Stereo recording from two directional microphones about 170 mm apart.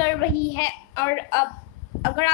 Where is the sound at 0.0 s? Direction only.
20° left (ahead or behind).